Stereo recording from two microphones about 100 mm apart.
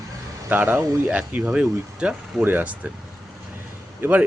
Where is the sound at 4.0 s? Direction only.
20° right (ahead or behind).